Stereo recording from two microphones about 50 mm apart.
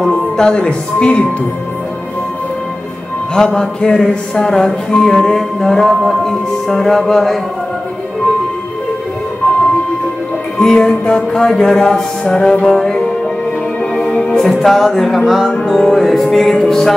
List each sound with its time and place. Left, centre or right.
0.0 s music: centre
0.5 s speech: left
3.3 s music: centre
10.6 s music: centre
14.4 s music: centre
15.6 s music: centre